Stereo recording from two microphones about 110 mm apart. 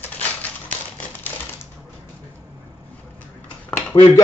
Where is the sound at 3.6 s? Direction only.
10° left (ahead or behind).